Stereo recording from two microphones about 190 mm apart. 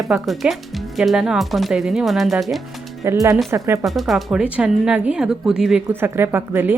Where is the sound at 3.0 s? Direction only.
15° right (ahead or behind).